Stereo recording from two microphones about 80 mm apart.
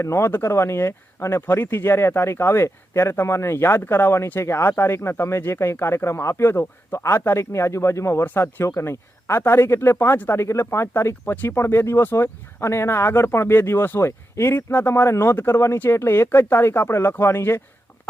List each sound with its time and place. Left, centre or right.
0.0 s speech: left